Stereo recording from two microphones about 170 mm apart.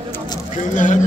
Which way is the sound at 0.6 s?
50° left (ahead or behind).